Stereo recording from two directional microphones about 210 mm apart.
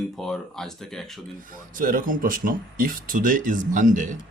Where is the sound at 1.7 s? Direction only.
40° right (ahead or behind).